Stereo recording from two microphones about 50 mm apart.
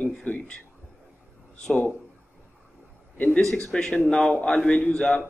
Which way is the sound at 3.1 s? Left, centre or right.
Left.